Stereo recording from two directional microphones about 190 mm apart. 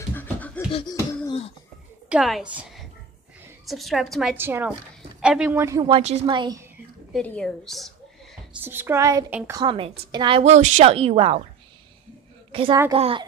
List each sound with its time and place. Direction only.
0.1 s beatboxing: 10° left (ahead or behind)
0.7 s beatboxing: 25° left (ahead or behind)
2.0 s a woman's voice: centre (ahead or behind)
5.9 s a woman's voice: 30° right (ahead or behind)
7.1 s a woman's voice: 5° left (ahead or behind)
8.6 s a woman's voice: 10° right (ahead or behind); by 11.4 s 30° right (ahead or behind)
12.5 s a woman's voice: 30° right (ahead or behind)